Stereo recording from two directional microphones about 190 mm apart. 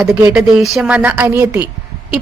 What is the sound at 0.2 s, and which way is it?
A woman's voice, 5° right (ahead or behind).